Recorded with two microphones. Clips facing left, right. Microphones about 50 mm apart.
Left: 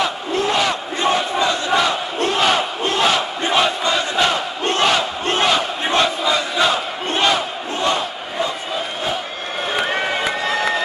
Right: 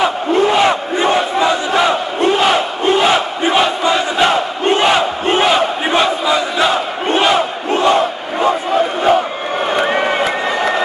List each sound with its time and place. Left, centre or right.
0.0 s crowd: right
9.8 s run: centre
10.2 s crowd: centre